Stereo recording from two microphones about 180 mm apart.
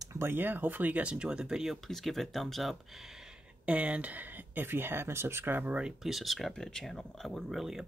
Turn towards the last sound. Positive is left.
turn(degrees=0)  # may be behind; listen again after turning